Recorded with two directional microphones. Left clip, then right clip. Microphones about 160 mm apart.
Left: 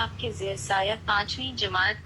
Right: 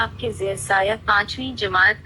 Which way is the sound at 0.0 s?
35° right (ahead or behind).